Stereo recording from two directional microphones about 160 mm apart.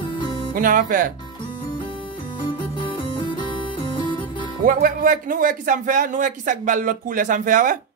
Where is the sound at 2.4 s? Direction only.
30° left (ahead or behind).